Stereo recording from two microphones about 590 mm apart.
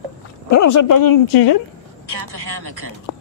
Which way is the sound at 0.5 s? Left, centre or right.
Left.